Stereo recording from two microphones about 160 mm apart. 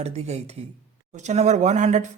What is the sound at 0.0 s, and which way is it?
Speech, 45° right (ahead or behind).